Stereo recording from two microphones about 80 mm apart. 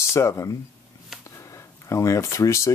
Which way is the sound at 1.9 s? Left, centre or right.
Left.